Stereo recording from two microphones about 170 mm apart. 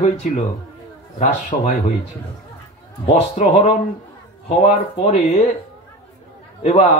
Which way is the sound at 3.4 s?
45° left (ahead or behind).